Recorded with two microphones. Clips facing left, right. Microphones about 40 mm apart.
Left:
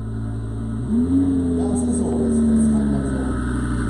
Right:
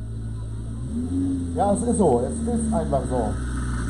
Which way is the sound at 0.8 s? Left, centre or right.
Left.